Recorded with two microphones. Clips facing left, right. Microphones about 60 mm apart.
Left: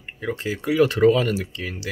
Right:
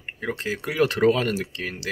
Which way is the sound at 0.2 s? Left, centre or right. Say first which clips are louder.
Left 1 dB; right.